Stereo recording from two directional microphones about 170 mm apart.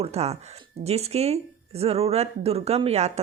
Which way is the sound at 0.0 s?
40° right (ahead or behind).